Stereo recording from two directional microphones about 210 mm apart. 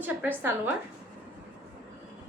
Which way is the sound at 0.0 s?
10° right (ahead or behind).